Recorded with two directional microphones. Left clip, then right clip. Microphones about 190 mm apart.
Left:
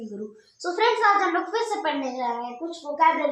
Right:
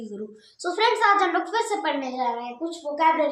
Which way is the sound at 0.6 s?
30° right (ahead or behind).